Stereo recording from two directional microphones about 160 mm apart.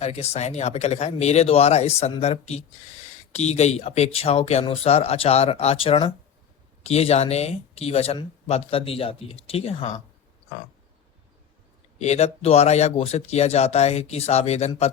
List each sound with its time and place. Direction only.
0.0 s speech: 40° left (ahead or behind)
11.9 s speech: 45° left (ahead or behind)